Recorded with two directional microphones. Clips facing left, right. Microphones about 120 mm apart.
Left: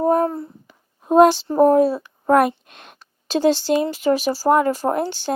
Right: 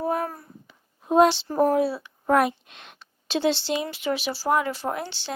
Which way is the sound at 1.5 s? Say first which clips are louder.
Left 7 dB; 35° left (ahead or behind).